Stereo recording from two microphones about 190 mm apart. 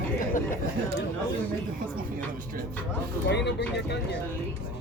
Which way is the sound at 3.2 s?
65° left (ahead or behind).